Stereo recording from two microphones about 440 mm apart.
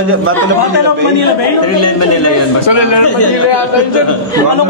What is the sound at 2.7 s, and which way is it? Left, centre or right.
Speech, left.